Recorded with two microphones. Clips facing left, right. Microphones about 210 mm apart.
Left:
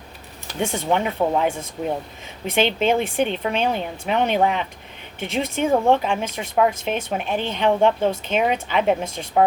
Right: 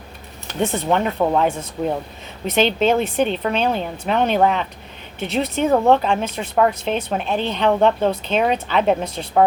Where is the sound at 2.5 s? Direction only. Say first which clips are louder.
Right 2 dB; 15° left (ahead or behind).